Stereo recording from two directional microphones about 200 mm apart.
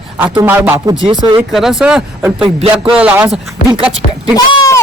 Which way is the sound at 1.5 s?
Centre (ahead or behind).